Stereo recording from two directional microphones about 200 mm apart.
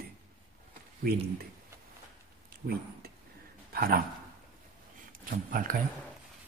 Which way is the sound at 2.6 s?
40° right (ahead or behind).